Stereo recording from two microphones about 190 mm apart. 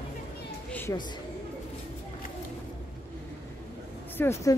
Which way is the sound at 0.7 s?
10° left (ahead or behind).